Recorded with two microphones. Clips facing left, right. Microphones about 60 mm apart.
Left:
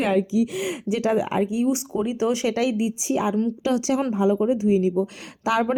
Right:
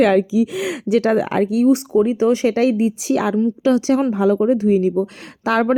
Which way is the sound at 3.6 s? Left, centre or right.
Right.